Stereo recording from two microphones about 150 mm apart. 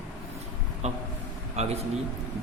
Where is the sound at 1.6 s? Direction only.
45° right (ahead or behind).